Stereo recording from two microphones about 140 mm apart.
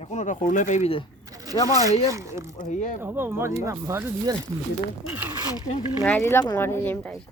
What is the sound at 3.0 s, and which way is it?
Speech, 15° right (ahead or behind).